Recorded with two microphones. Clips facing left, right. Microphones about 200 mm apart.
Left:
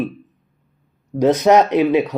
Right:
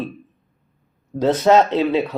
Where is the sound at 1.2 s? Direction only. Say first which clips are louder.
Left 2 dB; 15° left (ahead or behind).